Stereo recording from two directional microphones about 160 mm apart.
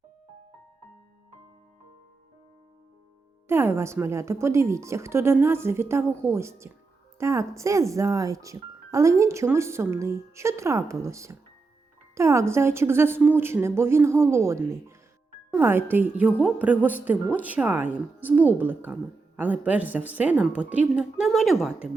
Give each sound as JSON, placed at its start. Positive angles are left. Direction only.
{"t": 3.5, "sound": "speech", "side_deg": -15}